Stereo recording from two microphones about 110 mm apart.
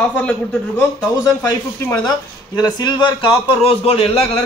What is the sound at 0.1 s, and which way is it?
Speech, 10° left (ahead or behind).